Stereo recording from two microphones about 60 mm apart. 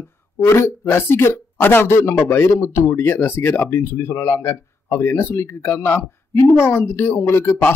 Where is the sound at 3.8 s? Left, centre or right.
Left.